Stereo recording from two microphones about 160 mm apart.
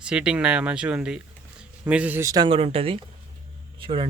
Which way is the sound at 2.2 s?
25° right (ahead or behind).